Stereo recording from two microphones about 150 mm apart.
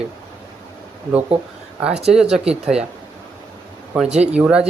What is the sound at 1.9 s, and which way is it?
Speech, 45° right (ahead or behind).